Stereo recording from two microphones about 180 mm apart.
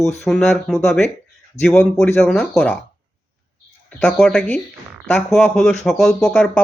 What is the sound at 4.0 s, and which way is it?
Speech, 5° left (ahead or behind).